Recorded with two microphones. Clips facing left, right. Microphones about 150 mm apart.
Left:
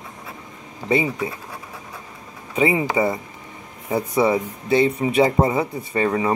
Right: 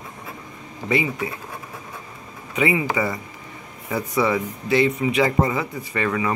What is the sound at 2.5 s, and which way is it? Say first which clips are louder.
Speech: left 2 dB; 30° left (ahead or behind).